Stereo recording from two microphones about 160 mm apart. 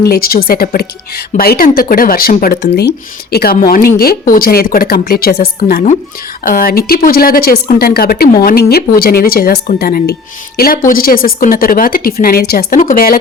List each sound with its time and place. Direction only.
0.0 s a woman's voice: 70° left (ahead or behind)
10.6 s speech: 60° left (ahead or behind)